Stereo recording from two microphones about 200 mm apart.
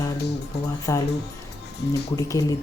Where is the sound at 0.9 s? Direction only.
15° left (ahead or behind).